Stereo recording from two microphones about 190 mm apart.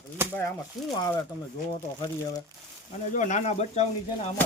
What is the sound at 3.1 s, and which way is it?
Speech, 40° left (ahead or behind).